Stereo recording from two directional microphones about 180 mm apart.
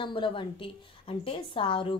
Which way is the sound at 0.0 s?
25° left (ahead or behind).